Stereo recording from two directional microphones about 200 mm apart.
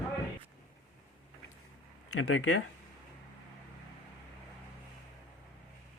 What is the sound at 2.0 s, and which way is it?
Speech, 90° left.